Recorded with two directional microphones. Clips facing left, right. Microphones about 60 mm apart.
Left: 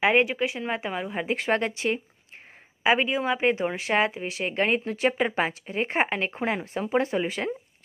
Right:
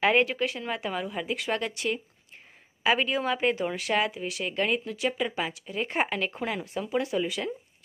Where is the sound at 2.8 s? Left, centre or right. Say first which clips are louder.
Left 2 dB; left.